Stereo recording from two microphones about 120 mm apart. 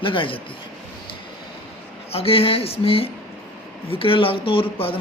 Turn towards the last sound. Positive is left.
turn(degrees=50)  # may be behind; listen again after turning